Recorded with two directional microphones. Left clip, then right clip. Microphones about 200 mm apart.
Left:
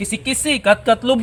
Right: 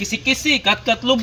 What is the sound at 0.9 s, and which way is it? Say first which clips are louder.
Speech: left 2 dB; 60° left (ahead or behind).